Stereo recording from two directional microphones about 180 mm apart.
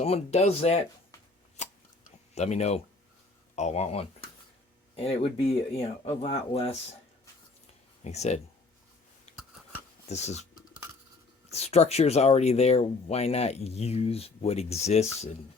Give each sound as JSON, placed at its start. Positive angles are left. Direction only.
{"t": 0.0, "sound": "speech", "side_deg": 35}
{"t": 2.3, "sound": "speech", "side_deg": 40}
{"t": 8.0, "sound": "speech", "side_deg": 40}
{"t": 9.3, "sound": "a sound", "side_deg": 40}
{"t": 10.1, "sound": "speech", "side_deg": 40}
{"t": 11.5, "sound": "speech", "side_deg": 35}